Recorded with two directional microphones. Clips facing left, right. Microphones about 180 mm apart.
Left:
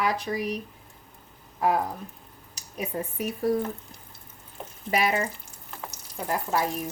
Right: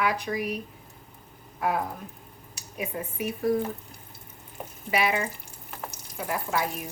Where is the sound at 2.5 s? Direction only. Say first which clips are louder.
Left 2 dB; 40° left (ahead or behind).